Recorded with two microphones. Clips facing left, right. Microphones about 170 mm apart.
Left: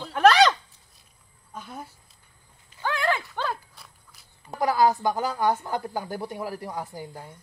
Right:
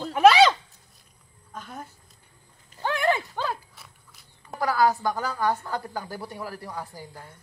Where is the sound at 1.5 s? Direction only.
10° left (ahead or behind).